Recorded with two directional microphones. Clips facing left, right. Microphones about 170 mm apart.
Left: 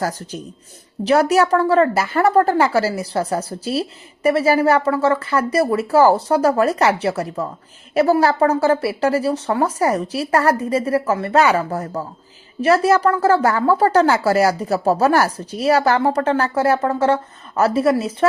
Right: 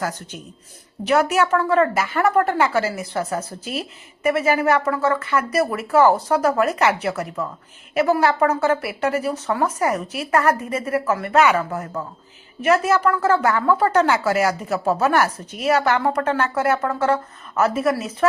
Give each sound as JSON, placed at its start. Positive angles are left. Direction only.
{"t": 0.0, "sound": "a woman's voice", "side_deg": 35}